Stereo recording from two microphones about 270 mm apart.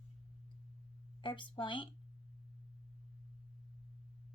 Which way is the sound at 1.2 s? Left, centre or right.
Centre.